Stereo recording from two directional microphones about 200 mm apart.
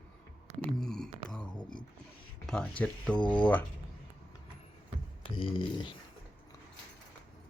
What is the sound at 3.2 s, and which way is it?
Speech, 20° left (ahead or behind).